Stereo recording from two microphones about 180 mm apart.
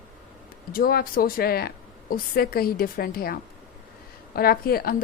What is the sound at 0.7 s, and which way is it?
A woman's voice, 55° left (ahead or behind).